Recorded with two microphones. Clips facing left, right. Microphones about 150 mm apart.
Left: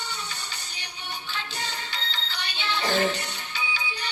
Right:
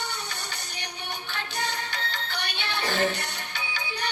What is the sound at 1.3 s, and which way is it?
Music, 55° right (ahead or behind).